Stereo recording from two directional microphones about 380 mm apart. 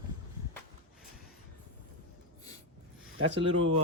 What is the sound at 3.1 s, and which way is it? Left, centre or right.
Speech, right.